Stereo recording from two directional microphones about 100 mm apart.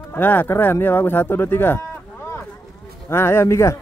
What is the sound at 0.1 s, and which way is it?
Speech, 20° left (ahead or behind).